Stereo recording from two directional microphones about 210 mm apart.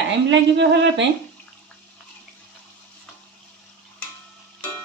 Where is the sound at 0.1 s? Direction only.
60° right (ahead or behind).